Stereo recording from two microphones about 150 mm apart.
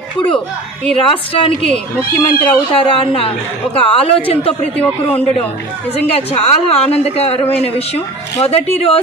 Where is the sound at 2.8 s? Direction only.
40° left (ahead or behind).